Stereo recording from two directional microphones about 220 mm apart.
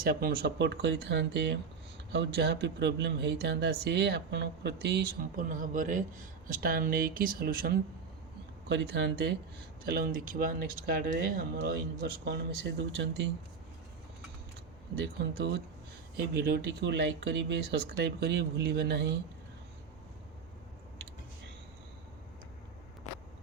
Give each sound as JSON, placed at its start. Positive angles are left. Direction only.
{"t": 0.0, "sound": "speech", "side_deg": -40}
{"t": 8.7, "sound": "speech", "side_deg": -55}
{"t": 9.8, "sound": "speech", "side_deg": -40}
{"t": 16.3, "sound": "speech", "side_deg": -45}